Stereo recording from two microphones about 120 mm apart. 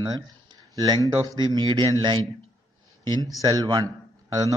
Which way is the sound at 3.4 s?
30° right (ahead or behind).